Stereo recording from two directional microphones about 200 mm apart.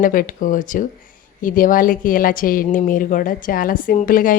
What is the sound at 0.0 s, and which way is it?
A woman's voice, 40° left (ahead or behind).